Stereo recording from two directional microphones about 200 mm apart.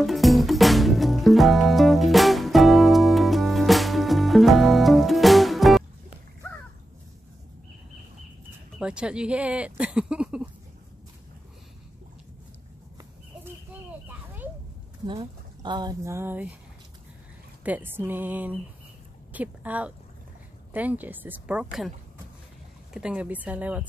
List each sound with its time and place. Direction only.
0.0 s music: centre (ahead or behind)
8.7 s speech: 5° right (ahead or behind)
14.0 s a sound: 10° right (ahead or behind)
15.0 s speech: 25° right (ahead or behind)
17.6 s a woman's voice: 10° right (ahead or behind)
22.9 s speech: 5° right (ahead or behind)